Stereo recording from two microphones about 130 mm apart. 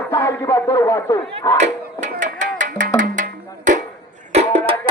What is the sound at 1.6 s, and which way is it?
Speech, 70° right (ahead or behind).